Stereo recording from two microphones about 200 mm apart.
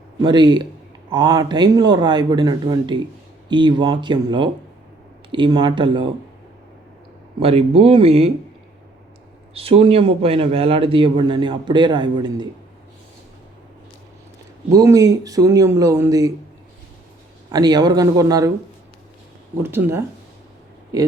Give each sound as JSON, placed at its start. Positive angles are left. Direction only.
{"t": 0.2, "sound": "a man's voice", "side_deg": -20}
{"t": 7.3, "sound": "a man's voice", "side_deg": -30}
{"t": 9.6, "sound": "a man's voice", "side_deg": -30}
{"t": 14.7, "sound": "speech", "side_deg": -20}
{"t": 17.5, "sound": "a man's voice", "side_deg": -20}
{"t": 19.6, "sound": "speech", "side_deg": -10}